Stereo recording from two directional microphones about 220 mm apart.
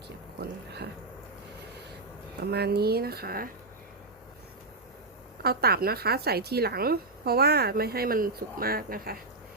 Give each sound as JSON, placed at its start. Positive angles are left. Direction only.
{"t": 2.4, "sound": "speech", "side_deg": -45}
{"t": 5.4, "sound": "speech", "side_deg": -45}